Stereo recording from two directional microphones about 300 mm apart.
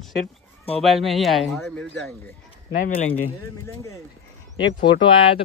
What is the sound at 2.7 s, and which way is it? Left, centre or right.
Speech, left.